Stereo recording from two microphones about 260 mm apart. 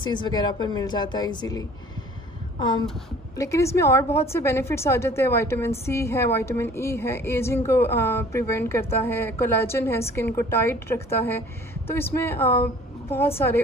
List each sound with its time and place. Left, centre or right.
0.0 s a woman's voice: centre
3.3 s a woman's voice: centre